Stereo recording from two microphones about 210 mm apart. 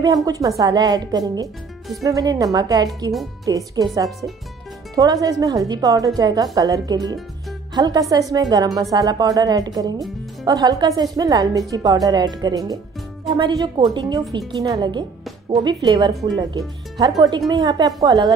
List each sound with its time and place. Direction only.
0.0 s a woman's voice: 15° right (ahead or behind)
17.5 s a woman's voice: 20° right (ahead or behind)